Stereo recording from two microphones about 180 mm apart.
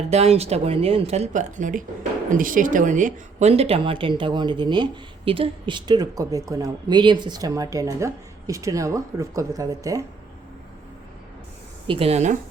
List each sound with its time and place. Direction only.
0.1 s speech: 35° right (ahead or behind); by 10.1 s 20° right (ahead or behind)
11.9 s speech: 35° right (ahead or behind)